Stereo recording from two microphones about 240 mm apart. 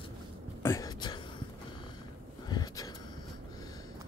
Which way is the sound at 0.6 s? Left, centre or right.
Centre.